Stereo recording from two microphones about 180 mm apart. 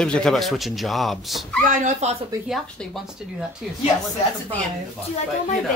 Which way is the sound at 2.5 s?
Centre (ahead or behind).